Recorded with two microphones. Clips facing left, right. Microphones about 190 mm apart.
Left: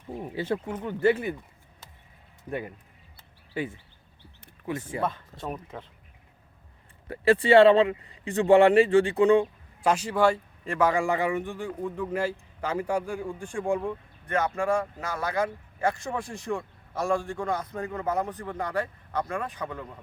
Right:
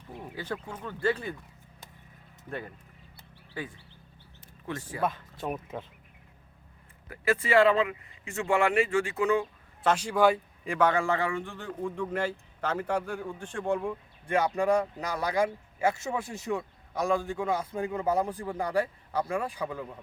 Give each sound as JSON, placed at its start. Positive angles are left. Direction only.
{"t": 0.2, "sound": "speech", "side_deg": 25}
{"t": 2.5, "sound": "a man's voice", "side_deg": 15}
{"t": 3.5, "sound": "speech", "side_deg": 25}
{"t": 4.9, "sound": "speech", "side_deg": 25}
{"t": 5.4, "sound": "speech", "side_deg": -5}
{"t": 7.1, "sound": "speech", "side_deg": 30}
{"t": 9.8, "sound": "a man's voice", "side_deg": 5}
{"t": 14.3, "sound": "speech", "side_deg": -10}